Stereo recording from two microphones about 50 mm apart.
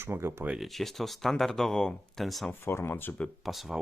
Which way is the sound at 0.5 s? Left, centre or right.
Centre.